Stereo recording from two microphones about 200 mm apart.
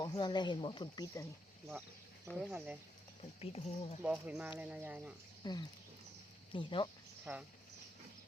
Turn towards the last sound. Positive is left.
turn(degrees=-10)  # may be behind; listen again after turning